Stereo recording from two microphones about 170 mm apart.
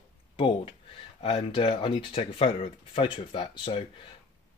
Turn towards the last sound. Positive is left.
turn(degrees=30)  # may be behind; listen again after turning